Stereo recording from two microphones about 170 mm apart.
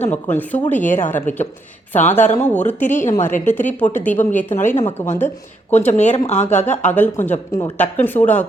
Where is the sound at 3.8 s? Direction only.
10° left (ahead or behind).